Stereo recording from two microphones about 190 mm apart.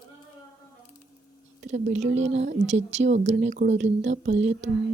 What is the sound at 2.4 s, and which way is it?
A woman's voice, 35° right (ahead or behind).